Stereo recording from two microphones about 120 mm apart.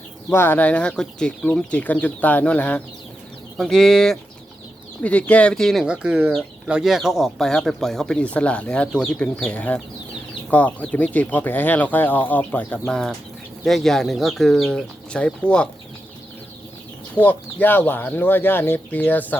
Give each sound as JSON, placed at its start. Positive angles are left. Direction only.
{"t": 0.3, "sound": "speech", "side_deg": 20}
{"t": 17.2, "sound": "speech", "side_deg": 15}